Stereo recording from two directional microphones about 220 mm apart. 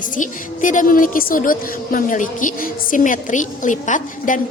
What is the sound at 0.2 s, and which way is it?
A woman's voice, 35° left (ahead or behind).